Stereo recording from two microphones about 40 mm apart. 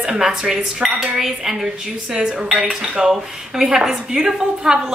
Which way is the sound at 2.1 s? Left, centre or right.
Centre.